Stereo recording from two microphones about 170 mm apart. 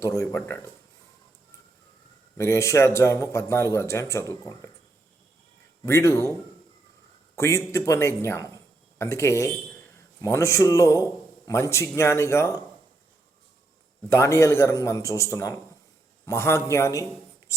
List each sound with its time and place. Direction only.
0.0 s a man's voice: 15° left (ahead or behind)
2.4 s a man's voice: 15° left (ahead or behind)
5.8 s a man's voice: 15° left (ahead or behind)
7.3 s a man's voice: 15° left (ahead or behind)
14.1 s a man's voice: 15° left (ahead or behind)